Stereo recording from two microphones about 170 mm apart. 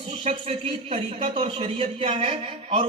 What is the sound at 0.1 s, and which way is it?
Speech, 35° right (ahead or behind).